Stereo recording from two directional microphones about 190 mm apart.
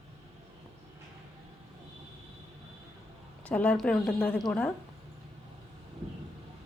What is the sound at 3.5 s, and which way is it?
A woman's voice, 5° left (ahead or behind).